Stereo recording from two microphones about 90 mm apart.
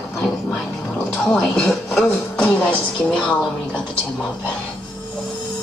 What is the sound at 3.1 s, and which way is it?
Speech, 15° left (ahead or behind).